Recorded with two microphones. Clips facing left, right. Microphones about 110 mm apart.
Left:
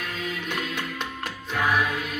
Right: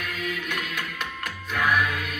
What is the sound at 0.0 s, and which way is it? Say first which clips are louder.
Music: even; 30° left (ahead or behind).